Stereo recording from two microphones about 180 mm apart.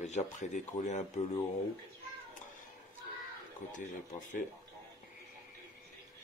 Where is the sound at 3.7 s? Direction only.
45° left (ahead or behind).